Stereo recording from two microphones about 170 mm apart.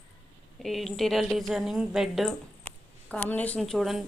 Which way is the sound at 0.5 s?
Centre (ahead or behind).